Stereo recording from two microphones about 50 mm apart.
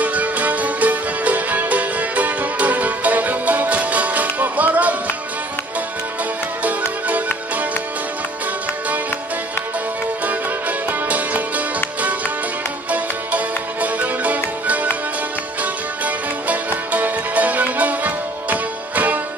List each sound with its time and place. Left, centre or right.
0.0 s music: right
10.9 s music: right